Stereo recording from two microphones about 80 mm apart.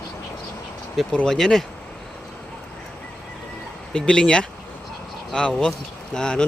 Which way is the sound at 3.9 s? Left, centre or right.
Centre.